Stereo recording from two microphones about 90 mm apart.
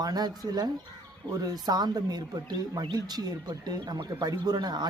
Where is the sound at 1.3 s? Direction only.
45° right (ahead or behind).